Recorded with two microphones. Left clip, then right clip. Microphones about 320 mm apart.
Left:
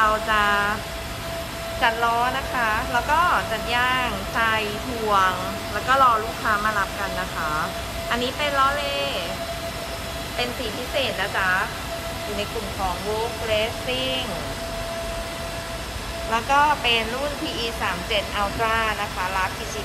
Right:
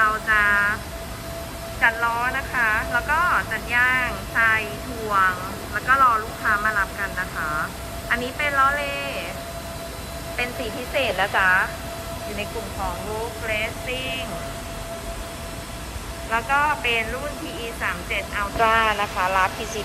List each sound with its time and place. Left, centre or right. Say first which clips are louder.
0.0 s a sound: right 1 dB; centre
1.8 s speech: even; centre
5.9 s speech: even; centre
8.1 s speech: right 1 dB; centre
11.0 s speech: right 3 dB; centre
16.3 s speech: left 2 dB; centre